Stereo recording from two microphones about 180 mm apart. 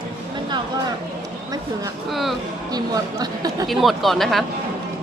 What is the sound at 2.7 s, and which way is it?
Speech, 20° right (ahead or behind).